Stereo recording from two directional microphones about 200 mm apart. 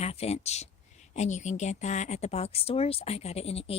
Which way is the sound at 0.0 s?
30° left (ahead or behind).